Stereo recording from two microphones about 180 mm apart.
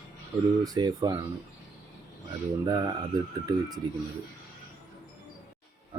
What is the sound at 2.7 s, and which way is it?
Speech, 20° right (ahead or behind).